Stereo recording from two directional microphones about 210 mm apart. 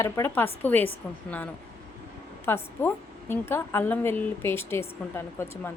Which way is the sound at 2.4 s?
10° left (ahead or behind).